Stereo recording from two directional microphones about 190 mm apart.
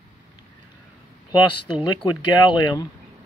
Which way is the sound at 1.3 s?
25° left (ahead or behind).